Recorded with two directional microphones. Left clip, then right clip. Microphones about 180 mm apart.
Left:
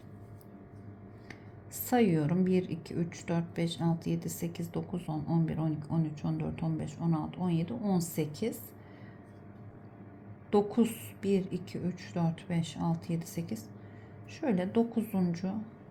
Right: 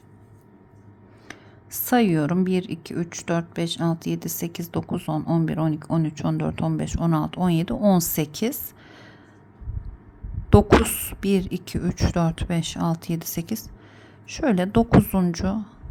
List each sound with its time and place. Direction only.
1.3 s speech: 30° right (ahead or behind)
10.5 s speech: 35° right (ahead or behind)